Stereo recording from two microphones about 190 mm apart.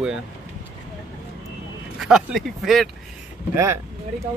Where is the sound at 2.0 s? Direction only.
Centre (ahead or behind).